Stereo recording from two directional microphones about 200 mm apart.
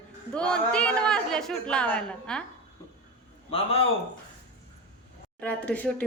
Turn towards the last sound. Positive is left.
turn(degrees=5)  # may be behind; listen again after turning